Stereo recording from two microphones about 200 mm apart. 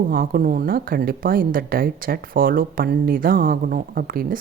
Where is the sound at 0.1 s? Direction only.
45° right (ahead or behind).